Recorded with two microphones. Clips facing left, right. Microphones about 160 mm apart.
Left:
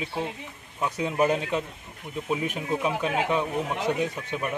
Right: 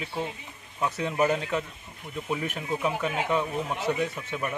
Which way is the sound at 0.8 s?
10° left (ahead or behind).